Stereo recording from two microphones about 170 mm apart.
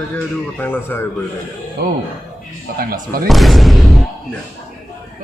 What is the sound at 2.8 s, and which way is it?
Speech, 60° right (ahead or behind).